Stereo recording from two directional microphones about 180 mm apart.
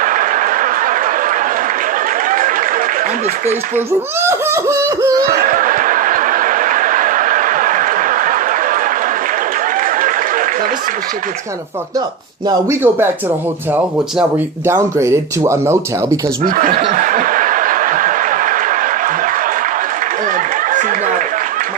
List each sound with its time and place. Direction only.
0.0 s a sound: 50° right (ahead or behind)
4.2 s speech: 15° right (ahead or behind)
5.3 s snicker: 50° right (ahead or behind)
9.8 s a sound: 45° right (ahead or behind)
12.5 s speech: 15° right (ahead or behind)
16.4 s snicker: 50° right (ahead or behind)
20.3 s chatter: 45° right (ahead or behind)